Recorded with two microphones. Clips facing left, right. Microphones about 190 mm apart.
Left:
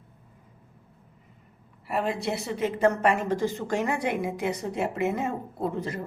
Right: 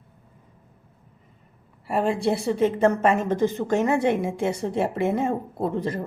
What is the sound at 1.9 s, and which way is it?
A woman's voice, 30° right (ahead or behind).